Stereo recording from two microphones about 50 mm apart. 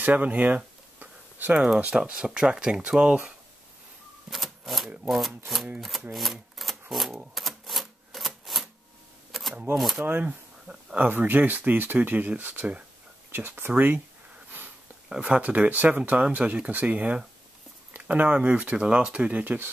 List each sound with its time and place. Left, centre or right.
0.0 s speech: right
0.9 s a sound: right
1.8 s speech: right
4.3 s speech: centre
6.1 s typewriter: centre
9.3 s camera: centre
9.8 s speech: centre
10.2 s a sound: centre
11.0 s speech: right
13.3 s speech: right
15.0 s speech: right
17.9 s a sound: right
18.2 s speech: right
19.4 s speech: right